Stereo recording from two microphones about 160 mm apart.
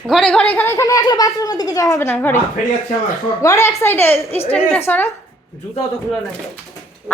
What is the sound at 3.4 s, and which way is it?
A woman's voice, 20° left (ahead or behind).